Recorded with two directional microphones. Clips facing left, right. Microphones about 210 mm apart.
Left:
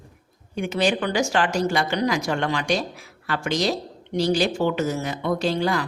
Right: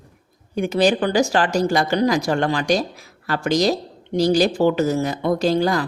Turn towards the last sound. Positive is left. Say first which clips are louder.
# right 4 dB
turn(degrees=-40)  # may be behind; listen again after turning